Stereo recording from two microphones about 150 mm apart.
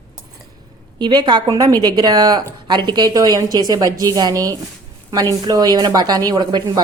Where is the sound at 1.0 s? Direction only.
30° right (ahead or behind).